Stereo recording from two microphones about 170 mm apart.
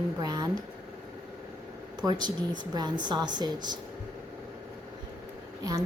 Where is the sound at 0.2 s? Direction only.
20° right (ahead or behind).